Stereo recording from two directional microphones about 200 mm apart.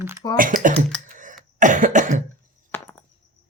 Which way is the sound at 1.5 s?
40° right (ahead or behind).